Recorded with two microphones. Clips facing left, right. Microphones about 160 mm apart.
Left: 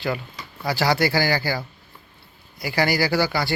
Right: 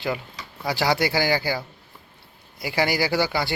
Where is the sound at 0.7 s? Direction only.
20° right (ahead or behind).